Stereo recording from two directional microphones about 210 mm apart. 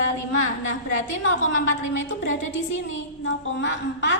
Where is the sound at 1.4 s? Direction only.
65° left (ahead or behind).